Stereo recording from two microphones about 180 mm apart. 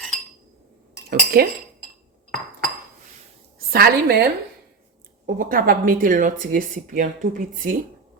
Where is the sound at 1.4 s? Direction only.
55° right (ahead or behind).